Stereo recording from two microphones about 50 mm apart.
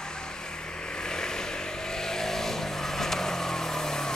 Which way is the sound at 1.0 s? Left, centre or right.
Centre.